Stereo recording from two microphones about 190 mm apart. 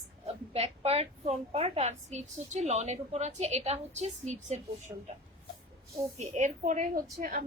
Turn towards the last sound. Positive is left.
turn(degrees=-50)  # may be behind; listen again after turning